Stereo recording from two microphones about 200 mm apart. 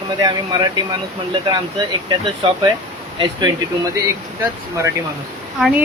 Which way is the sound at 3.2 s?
20° right (ahead or behind).